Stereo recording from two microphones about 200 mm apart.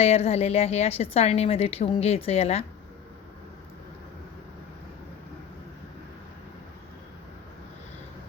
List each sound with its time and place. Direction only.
0.0 s a woman's voice: 30° left (ahead or behind)